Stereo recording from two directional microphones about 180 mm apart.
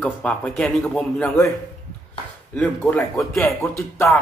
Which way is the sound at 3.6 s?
15° left (ahead or behind).